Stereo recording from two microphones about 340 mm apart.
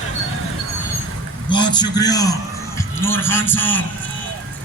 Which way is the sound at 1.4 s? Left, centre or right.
Centre.